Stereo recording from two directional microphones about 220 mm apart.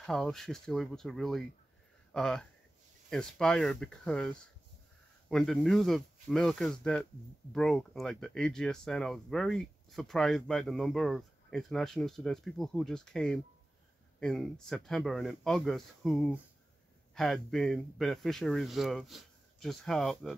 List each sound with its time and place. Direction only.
0.0 s speech: centre (ahead or behind)